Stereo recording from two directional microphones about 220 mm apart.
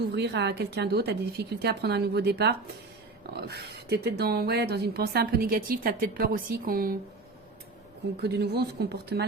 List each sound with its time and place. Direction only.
0.0 s speech: 50° right (ahead or behind)
8.2 s speech: 45° right (ahead or behind)